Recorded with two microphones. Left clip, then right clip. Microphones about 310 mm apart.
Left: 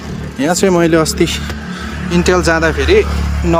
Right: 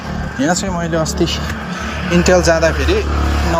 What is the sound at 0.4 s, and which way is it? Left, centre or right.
Speech, left.